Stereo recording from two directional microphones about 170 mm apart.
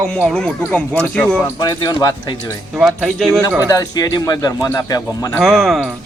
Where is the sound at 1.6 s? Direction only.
25° left (ahead or behind).